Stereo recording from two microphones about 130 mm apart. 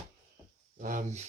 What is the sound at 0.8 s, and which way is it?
Speech, 85° right.